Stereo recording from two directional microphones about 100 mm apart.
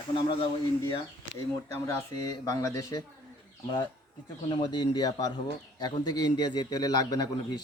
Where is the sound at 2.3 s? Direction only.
35° left (ahead or behind).